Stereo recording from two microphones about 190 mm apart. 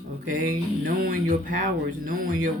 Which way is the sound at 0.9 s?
50° right (ahead or behind).